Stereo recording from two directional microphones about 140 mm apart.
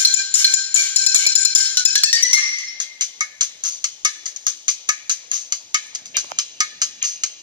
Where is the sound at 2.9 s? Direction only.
30° right (ahead or behind).